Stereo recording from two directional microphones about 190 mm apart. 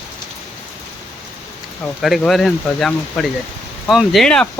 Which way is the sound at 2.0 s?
Centre (ahead or behind).